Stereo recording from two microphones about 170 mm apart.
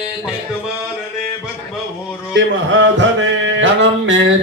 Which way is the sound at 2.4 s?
90° right.